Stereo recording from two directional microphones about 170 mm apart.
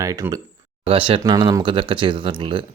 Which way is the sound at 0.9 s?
30° right (ahead or behind).